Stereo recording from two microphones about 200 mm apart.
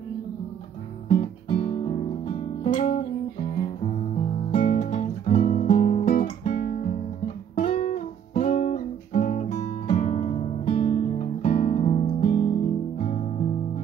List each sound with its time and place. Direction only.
1.0 s guitar: 35° left (ahead or behind)
4.5 s music: 35° left (ahead or behind)
5.4 s guitar: 40° left (ahead or behind)
7.5 s music: 30° left (ahead or behind)